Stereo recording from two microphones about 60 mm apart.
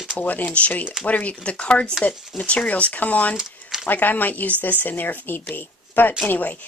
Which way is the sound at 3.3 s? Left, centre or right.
Centre.